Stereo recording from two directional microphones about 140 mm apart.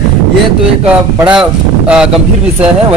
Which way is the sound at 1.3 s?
5° right (ahead or behind).